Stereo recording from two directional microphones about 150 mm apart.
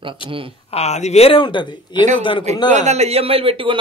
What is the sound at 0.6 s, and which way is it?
Speech, 45° left (ahead or behind).